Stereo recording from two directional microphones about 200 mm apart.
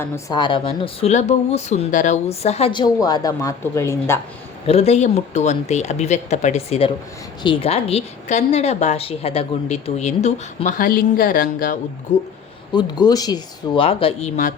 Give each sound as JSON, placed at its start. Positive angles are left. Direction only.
{"t": 0.0, "sound": "speech", "side_deg": 20}
{"t": 4.6, "sound": "a woman's voice", "side_deg": 30}
{"t": 12.7, "sound": "speech", "side_deg": 20}